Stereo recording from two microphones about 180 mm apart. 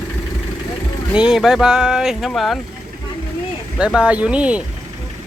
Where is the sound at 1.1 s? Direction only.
5° right (ahead or behind).